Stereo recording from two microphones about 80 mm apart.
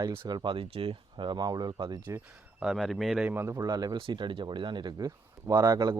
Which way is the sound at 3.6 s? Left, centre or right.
Right.